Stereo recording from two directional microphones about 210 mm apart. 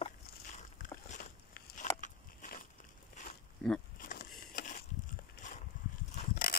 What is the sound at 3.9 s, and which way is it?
Vehicle, 40° left (ahead or behind).